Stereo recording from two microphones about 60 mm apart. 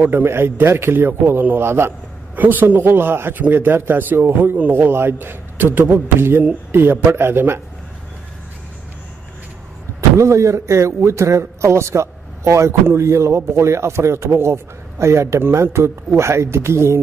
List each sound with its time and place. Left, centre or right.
0.0 s a man's voice: right
2.3 s a man's voice: right
9.9 s a man's voice: right